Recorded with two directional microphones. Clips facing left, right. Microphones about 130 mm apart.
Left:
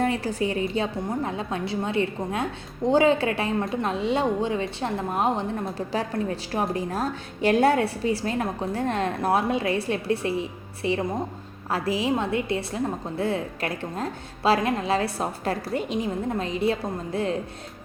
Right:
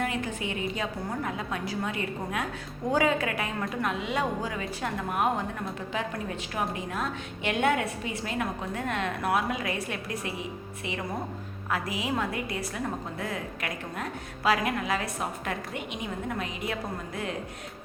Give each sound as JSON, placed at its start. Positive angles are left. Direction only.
{"t": 0.0, "sound": "a woman's voice", "side_deg": 35}